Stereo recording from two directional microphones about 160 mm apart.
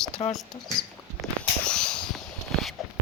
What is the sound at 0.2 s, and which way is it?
Speech, 25° left (ahead or behind).